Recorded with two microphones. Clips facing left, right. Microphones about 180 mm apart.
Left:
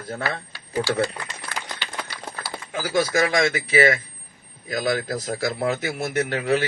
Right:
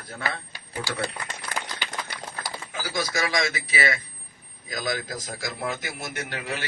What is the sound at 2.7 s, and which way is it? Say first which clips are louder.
Speech: left 8 dB; 50° left (ahead or behind).